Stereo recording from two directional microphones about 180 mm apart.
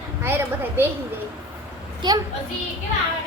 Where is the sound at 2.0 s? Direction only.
25° right (ahead or behind).